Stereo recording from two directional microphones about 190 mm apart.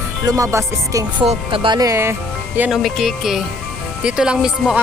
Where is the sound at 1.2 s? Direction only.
30° right (ahead or behind); by 4.8 s 5° right (ahead or behind).